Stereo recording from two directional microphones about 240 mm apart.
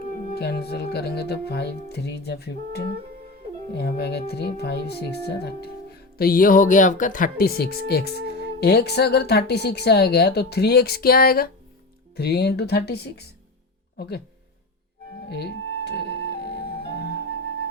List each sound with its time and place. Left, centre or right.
0.1 s a woman's voice: left
15.3 s music: left